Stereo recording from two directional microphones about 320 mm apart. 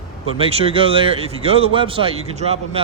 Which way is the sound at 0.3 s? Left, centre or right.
Centre.